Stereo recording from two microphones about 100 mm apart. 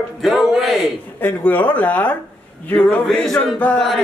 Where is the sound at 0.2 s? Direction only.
Centre (ahead or behind).